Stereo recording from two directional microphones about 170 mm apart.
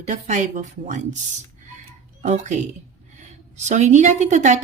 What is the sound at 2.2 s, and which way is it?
Speech, 45° right (ahead or behind).